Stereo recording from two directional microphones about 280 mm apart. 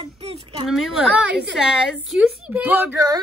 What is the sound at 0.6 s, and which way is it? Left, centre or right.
A woman's voice, centre.